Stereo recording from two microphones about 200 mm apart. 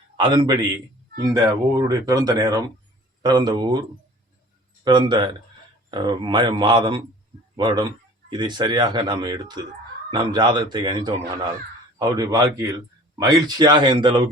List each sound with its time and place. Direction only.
0.2 s speech: 25° right (ahead or behind)